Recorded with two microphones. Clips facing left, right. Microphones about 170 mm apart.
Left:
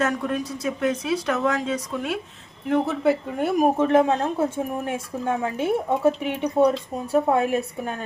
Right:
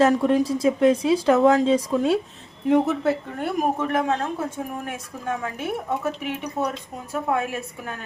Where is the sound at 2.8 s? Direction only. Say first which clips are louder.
Left 1 dB; centre (ahead or behind).